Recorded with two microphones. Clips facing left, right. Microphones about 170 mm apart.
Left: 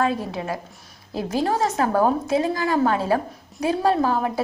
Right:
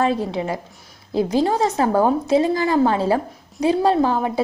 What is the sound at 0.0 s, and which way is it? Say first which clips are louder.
A woman's voice: right 3 dB; 25° right (ahead or behind).